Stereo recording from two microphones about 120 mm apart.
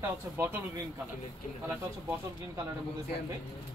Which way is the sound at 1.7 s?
20° right (ahead or behind).